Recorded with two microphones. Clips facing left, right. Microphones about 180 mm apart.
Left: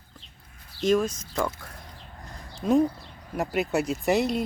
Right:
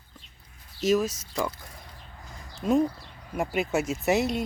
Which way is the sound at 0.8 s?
5° right (ahead or behind).